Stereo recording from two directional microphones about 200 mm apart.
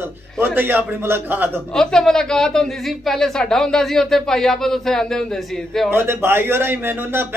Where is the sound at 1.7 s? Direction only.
5° left (ahead or behind).